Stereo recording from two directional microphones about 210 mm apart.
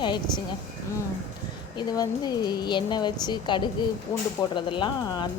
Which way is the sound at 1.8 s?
20° left (ahead or behind).